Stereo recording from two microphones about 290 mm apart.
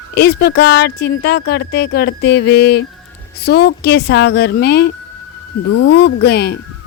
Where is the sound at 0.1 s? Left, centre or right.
Left.